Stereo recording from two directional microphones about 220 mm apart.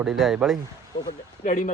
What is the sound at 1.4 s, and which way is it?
Speech, 40° left (ahead or behind).